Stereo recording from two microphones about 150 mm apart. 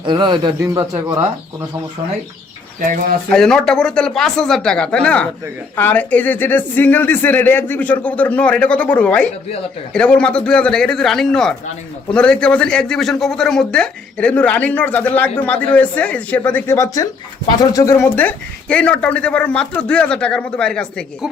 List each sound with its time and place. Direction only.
0.0 s a man's voice: 30° right (ahead or behind)
3.2 s speech: 5° left (ahead or behind)